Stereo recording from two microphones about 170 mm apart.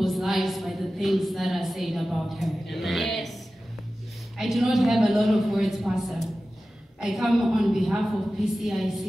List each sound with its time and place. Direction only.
0.0 s a woman's voice: centre (ahead or behind)
4.4 s a woman's voice: centre (ahead or behind)